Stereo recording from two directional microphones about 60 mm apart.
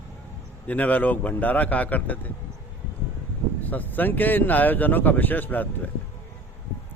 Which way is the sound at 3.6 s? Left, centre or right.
Left.